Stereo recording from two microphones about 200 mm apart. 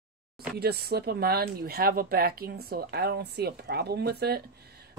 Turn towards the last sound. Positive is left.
turn(degrees=-55)  # may be behind; listen again after turning